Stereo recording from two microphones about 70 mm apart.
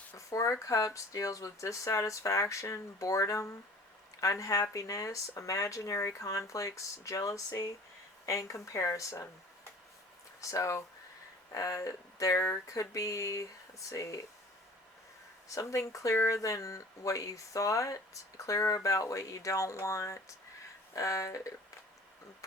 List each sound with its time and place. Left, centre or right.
0.2 s speech: left
10.4 s speech: left
12.6 s speech: left
15.4 s speech: left